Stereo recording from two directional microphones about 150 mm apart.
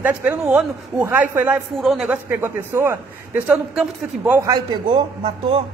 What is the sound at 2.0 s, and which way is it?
A man's voice, 15° right (ahead or behind).